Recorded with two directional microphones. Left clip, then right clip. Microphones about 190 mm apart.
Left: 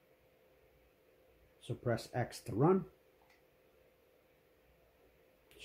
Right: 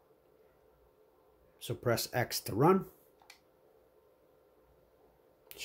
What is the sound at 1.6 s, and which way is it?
Speech, 25° right (ahead or behind).